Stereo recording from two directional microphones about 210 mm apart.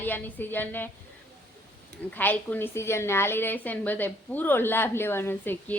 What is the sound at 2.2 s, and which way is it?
A woman's voice, 10° left (ahead or behind).